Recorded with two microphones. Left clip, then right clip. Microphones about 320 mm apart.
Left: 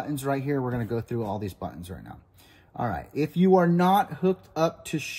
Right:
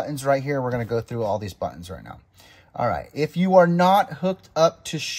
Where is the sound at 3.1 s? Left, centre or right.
Right.